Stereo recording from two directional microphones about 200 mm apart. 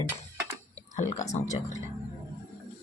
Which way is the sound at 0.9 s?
35° left (ahead or behind).